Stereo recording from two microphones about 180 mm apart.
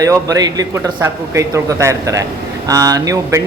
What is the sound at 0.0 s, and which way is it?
A man's voice, 20° right (ahead or behind).